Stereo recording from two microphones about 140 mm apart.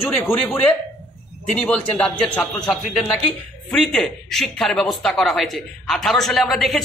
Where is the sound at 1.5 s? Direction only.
5° left (ahead or behind).